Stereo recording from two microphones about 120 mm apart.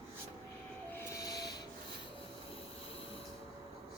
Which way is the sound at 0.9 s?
25° left (ahead or behind).